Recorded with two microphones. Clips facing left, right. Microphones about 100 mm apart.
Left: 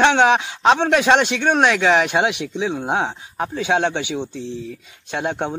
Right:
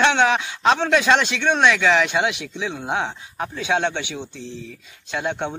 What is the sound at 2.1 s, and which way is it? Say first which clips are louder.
Speech: left 3 dB; 50° left (ahead or behind).